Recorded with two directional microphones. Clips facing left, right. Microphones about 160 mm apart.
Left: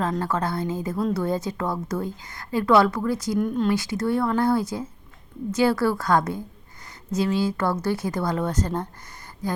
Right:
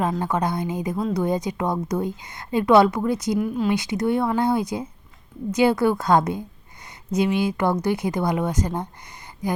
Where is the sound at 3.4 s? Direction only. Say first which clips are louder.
Even; 5° right (ahead or behind).